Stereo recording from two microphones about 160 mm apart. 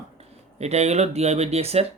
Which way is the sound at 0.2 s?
40° right (ahead or behind).